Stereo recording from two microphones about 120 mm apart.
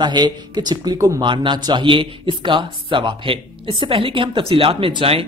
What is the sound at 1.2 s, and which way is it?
A man's voice, 40° right (ahead or behind).